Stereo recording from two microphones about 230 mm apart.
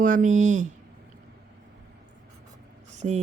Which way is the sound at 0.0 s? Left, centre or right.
Right.